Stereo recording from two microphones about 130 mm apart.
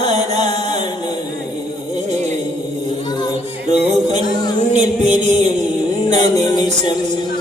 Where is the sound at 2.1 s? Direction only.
60° right (ahead or behind).